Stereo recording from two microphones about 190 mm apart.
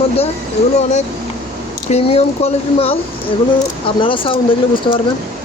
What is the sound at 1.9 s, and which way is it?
Speech, 35° left (ahead or behind).